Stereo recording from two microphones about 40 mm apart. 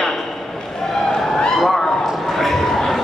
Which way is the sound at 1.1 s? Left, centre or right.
Left.